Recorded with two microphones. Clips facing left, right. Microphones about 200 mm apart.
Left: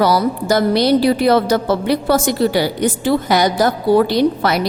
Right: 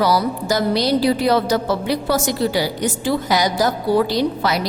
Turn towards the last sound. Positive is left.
turn(degrees=60)  # may be behind; listen again after turning